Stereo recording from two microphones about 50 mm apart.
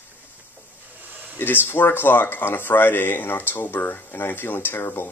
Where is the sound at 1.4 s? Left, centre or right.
Left.